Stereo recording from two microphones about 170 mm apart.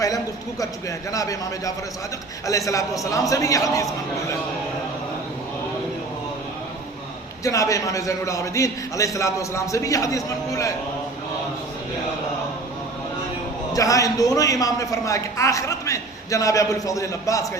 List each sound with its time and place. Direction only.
0.6 s a man's voice: 20° left (ahead or behind)
7.4 s a man's voice: 20° left (ahead or behind)
13.7 s a man's voice: 20° left (ahead or behind)